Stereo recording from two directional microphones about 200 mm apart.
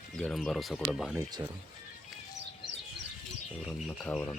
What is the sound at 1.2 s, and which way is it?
Speech, 20° right (ahead or behind).